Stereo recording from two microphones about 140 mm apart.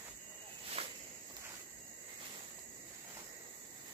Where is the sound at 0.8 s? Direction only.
45° right (ahead or behind).